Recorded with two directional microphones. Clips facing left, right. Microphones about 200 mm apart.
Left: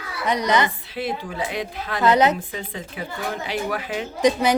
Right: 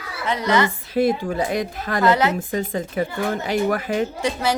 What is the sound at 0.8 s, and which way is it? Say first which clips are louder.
Speech: right 8 dB; 45° right (ahead or behind).